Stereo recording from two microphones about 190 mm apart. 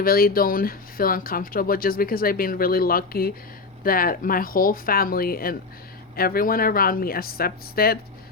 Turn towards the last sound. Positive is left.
turn(degrees=55)  # may be behind; listen again after turning